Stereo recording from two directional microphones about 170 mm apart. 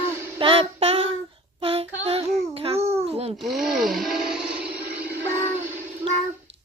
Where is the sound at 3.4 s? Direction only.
Centre (ahead or behind).